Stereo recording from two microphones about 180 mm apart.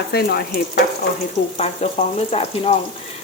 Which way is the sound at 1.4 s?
35° left (ahead or behind).